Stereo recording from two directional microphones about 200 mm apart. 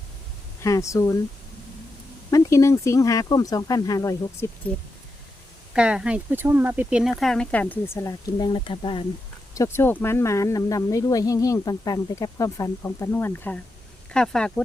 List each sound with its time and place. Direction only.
0.6 s speech: 15° left (ahead or behind)
2.3 s speech: 15° left (ahead or behind)
5.7 s speech: 5° right (ahead or behind); by 9.0 s 25° left (ahead or behind)
9.6 s speech: 10° left (ahead or behind)